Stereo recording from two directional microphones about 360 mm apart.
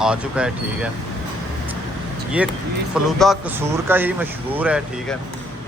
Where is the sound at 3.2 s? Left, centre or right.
Centre.